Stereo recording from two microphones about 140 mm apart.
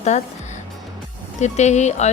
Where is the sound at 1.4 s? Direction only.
55° left (ahead or behind).